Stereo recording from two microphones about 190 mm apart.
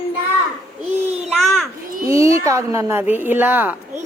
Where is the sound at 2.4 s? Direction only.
15° right (ahead or behind).